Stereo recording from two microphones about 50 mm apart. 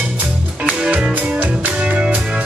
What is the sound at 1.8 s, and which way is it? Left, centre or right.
Music, right.